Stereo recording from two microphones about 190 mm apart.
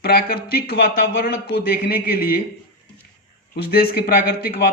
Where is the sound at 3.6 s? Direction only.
55° left (ahead or behind).